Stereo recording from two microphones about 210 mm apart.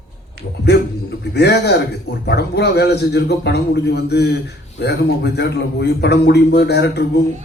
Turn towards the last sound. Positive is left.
turn(degrees=50)  # may be behind; listen again after turning